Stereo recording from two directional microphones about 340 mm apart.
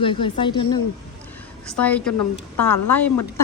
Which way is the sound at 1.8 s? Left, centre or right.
Centre.